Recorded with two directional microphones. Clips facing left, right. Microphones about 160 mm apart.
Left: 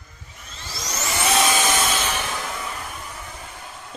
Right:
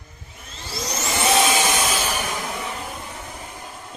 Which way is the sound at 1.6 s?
10° right (ahead or behind).